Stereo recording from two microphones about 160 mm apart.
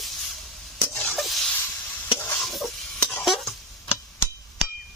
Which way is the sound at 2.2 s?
10° left (ahead or behind).